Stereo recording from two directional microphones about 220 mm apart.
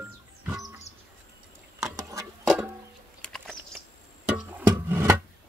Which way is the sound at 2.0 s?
15° right (ahead or behind).